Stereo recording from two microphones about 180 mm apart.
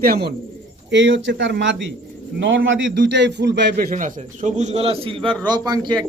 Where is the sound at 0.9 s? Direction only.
90° right.